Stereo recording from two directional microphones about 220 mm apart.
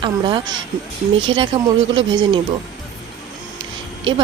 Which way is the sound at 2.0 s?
20° right (ahead or behind).